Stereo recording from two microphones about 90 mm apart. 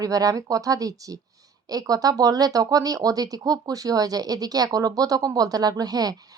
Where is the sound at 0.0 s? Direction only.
40° right (ahead or behind).